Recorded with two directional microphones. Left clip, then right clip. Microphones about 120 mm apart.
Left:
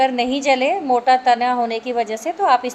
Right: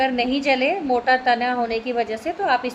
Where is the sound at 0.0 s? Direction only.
30° left (ahead or behind).